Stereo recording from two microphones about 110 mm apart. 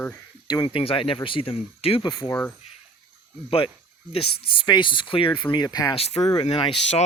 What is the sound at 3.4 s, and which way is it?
Speech, 55° left (ahead or behind).